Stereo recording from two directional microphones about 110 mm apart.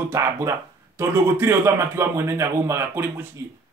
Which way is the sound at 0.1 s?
25° right (ahead or behind).